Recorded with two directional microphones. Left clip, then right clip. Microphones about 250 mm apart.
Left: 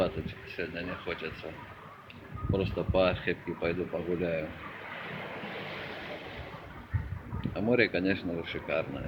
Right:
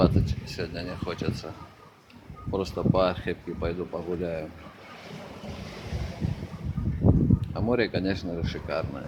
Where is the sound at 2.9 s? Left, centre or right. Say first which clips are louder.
Right 2 dB; centre.